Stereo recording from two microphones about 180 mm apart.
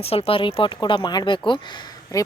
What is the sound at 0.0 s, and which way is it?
Speech, 35° left (ahead or behind).